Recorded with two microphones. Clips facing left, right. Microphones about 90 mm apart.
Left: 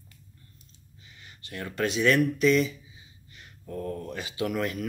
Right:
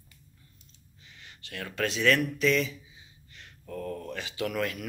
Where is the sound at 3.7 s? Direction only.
20° left (ahead or behind).